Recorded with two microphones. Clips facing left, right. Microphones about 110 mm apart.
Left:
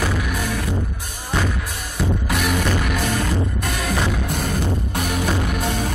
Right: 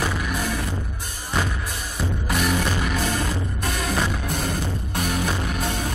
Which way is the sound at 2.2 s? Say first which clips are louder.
Right 1 dB; 55° left (ahead or behind).